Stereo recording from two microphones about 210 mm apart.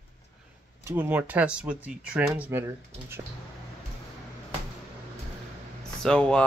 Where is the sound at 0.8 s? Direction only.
10° right (ahead or behind).